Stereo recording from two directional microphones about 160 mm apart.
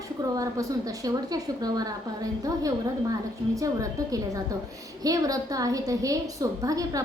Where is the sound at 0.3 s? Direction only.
20° right (ahead or behind).